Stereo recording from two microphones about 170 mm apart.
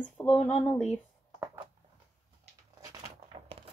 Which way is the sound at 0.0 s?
5° left (ahead or behind).